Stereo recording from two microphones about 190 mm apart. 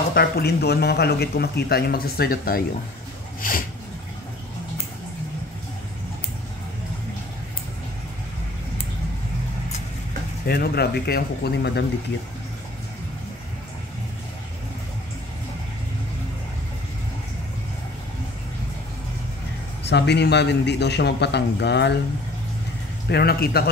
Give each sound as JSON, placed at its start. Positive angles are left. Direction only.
{"t": 0.1, "sound": "speech", "side_deg": 55}
{"t": 10.4, "sound": "speech", "side_deg": 55}
{"t": 19.9, "sound": "speech", "side_deg": 65}
{"t": 23.0, "sound": "speech", "side_deg": 55}